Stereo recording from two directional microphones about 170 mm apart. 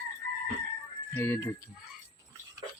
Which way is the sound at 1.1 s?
10° left (ahead or behind).